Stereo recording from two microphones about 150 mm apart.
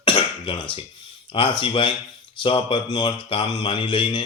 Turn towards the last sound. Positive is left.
turn(degrees=35)  # may be behind; listen again after turning